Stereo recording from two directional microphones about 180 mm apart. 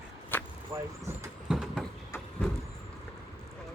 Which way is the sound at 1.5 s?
Centre (ahead or behind).